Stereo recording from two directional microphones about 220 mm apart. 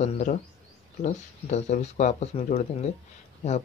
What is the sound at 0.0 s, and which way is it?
Speech, 30° left (ahead or behind).